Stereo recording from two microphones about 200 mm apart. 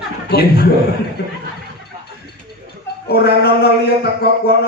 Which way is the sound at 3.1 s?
50° left (ahead or behind).